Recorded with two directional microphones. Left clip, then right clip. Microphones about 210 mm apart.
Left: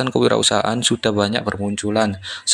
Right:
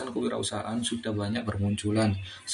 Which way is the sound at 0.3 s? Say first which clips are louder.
Left 15 dB; 50° left (ahead or behind).